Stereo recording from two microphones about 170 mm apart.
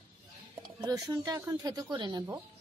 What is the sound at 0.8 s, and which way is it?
Speech, 20° right (ahead or behind).